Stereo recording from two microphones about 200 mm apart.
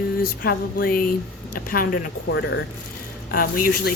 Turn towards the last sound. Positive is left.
turn(degrees=50)  # may be behind; listen again after turning